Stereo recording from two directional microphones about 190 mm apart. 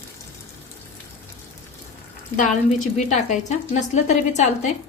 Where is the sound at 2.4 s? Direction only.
40° left (ahead or behind).